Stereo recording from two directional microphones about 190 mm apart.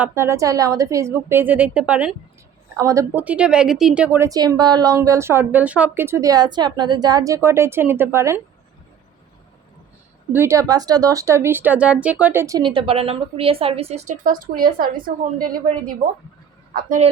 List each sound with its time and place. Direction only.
0.0 s a woman's voice: 15° right (ahead or behind)
2.7 s a woman's voice: 15° right (ahead or behind)
10.3 s a woman's voice: 15° right (ahead or behind); by 14.8 s 50° right (ahead or behind)
16.7 s a woman's voice: 45° right (ahead or behind)